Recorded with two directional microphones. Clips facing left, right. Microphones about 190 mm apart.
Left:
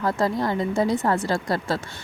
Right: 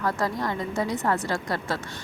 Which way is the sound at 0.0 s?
30° left (ahead or behind).